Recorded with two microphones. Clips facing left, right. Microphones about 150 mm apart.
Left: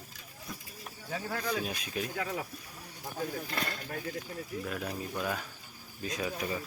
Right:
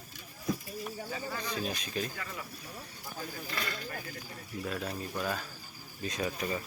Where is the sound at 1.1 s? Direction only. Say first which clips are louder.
Left 6 dB; 65° left (ahead or behind).